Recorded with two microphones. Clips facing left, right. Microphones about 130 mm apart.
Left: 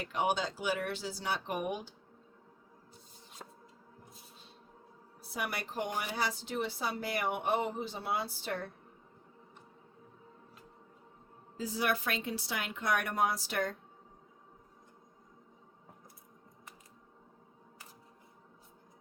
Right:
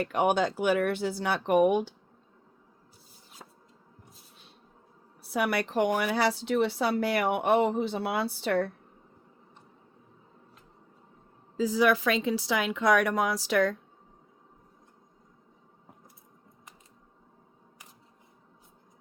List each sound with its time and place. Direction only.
0.0 s speech: 55° right (ahead or behind)
3.4 s a sound: centre (ahead or behind)
5.3 s speech: 70° right (ahead or behind)
11.5 s speech: 90° right